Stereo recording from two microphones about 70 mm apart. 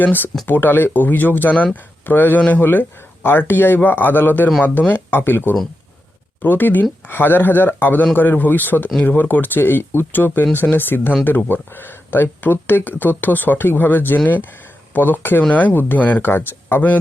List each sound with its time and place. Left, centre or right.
0.0 s speech: left